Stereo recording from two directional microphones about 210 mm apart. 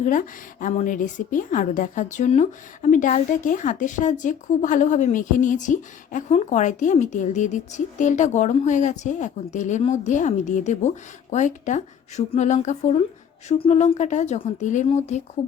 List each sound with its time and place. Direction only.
0.0 s a woman's voice: 40° left (ahead or behind)